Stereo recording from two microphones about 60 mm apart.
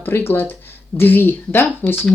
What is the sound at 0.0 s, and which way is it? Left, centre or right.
Speech, left.